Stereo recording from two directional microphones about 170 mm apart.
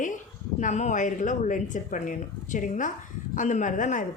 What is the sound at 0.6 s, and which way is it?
Speech, 45° left (ahead or behind).